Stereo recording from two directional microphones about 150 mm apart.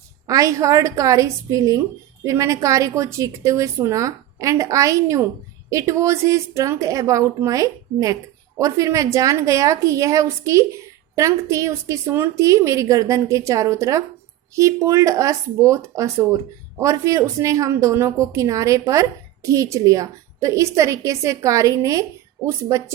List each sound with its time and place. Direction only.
0.3 s speech: 20° right (ahead or behind)